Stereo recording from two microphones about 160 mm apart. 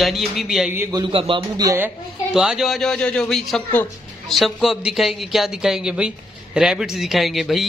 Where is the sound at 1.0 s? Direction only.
35° right (ahead or behind).